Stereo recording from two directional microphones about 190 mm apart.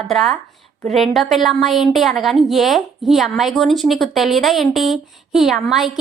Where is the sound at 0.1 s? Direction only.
Centre (ahead or behind).